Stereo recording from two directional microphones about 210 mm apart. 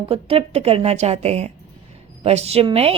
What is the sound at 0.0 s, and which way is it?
A woman's voice, 30° right (ahead or behind).